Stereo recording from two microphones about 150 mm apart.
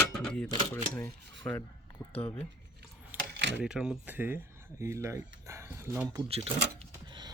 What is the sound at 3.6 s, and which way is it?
Speech, 5° right (ahead or behind).